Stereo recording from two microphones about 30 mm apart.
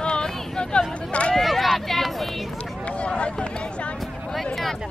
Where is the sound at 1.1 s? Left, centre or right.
Left.